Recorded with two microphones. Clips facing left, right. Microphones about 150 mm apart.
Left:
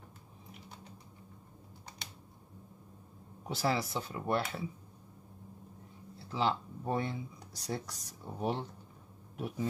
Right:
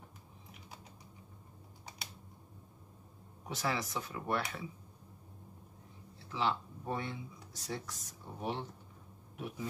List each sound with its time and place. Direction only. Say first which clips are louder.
3.4 s speech: left 4 dB; 30° left (ahead or behind)
6.1 s speech: left 2 dB; 35° left (ahead or behind)